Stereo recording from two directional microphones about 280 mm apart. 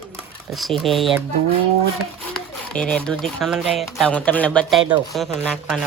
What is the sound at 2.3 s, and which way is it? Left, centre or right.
Speech, centre.